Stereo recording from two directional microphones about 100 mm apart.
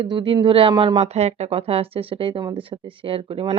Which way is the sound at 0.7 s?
45° right (ahead or behind).